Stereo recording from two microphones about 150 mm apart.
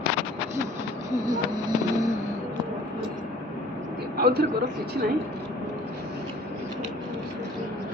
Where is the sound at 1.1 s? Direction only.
25° right (ahead or behind).